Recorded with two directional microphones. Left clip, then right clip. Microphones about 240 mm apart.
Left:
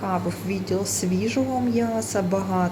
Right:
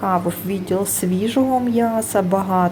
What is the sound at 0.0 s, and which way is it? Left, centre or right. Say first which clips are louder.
A woman's voice: right 7 dB; centre.